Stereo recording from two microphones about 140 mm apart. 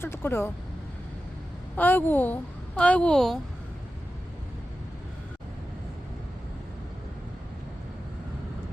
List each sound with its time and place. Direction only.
0.0 s a woman's voice: 15° left (ahead or behind)
1.7 s a woman's voice: 15° left (ahead or behind)